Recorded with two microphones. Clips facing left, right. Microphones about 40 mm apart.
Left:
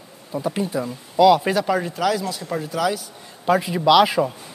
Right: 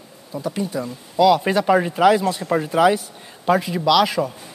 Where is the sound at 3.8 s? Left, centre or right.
Centre.